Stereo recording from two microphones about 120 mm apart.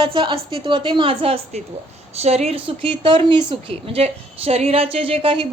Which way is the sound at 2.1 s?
60° right (ahead or behind).